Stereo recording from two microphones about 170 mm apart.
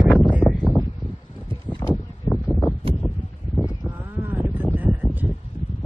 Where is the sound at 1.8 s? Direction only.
20° left (ahead or behind).